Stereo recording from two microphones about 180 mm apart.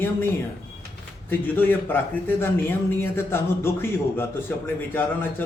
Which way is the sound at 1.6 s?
10° left (ahead or behind).